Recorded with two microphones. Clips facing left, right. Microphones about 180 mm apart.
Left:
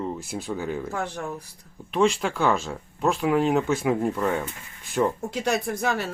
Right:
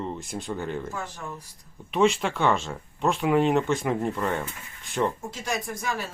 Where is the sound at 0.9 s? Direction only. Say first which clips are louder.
Left 6 dB; 70° left (ahead or behind).